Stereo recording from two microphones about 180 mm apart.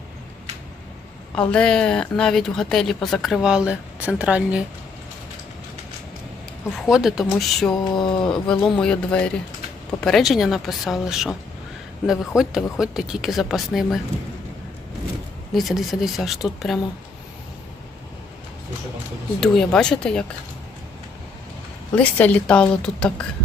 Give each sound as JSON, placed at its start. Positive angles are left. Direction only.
{"t": 1.4, "sound": "a woman's voice", "side_deg": 5}
{"t": 6.7, "sound": "a woman's voice", "side_deg": 0}
{"t": 7.7, "sound": "a sound", "side_deg": 25}
{"t": 8.3, "sound": "a woman's voice", "side_deg": 5}
{"t": 15.5, "sound": "a woman's voice", "side_deg": 0}
{"t": 19.4, "sound": "a woman's voice", "side_deg": 5}
{"t": 21.9, "sound": "a woman's voice", "side_deg": 10}